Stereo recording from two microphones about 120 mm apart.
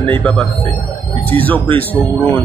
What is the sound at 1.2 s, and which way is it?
Speech, 15° left (ahead or behind).